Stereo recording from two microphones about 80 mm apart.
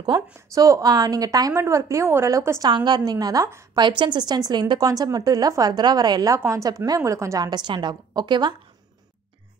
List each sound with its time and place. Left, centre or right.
0.0 s a woman's voice: right
0.7 s a woman's voice: right
2.7 s a woman's voice: right
3.0 s a woman's voice: right
4.0 s a woman's voice: right
6.3 s a woman's voice: right
7.4 s a woman's voice: right
7.9 s a woman's voice: right